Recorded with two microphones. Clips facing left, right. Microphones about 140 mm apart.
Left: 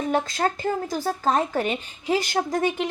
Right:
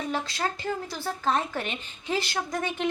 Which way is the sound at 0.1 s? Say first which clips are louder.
Left 6 dB; 45° left (ahead or behind).